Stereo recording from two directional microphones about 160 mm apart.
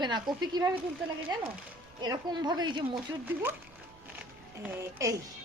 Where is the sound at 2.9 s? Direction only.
10° right (ahead or behind).